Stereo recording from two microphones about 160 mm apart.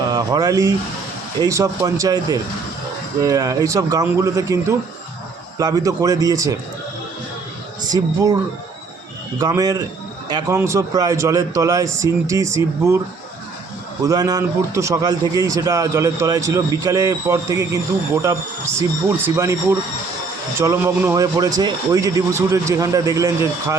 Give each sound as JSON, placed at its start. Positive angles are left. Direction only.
{"t": 0.0, "sound": "a man's voice", "side_deg": -25}
{"t": 7.9, "sound": "a man's voice", "side_deg": -25}
{"t": 9.4, "sound": "a man's voice", "side_deg": -25}
{"t": 14.0, "sound": "a man's voice", "side_deg": -25}
{"t": 20.6, "sound": "a man's voice", "side_deg": -15}